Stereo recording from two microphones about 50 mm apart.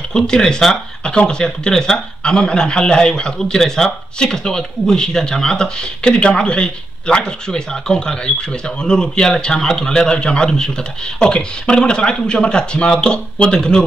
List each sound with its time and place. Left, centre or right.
0.1 s a man's voice: centre